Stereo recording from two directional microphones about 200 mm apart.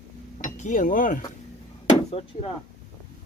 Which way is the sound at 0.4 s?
40° left (ahead or behind).